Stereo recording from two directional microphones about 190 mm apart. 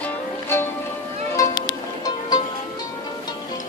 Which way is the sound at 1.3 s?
20° left (ahead or behind).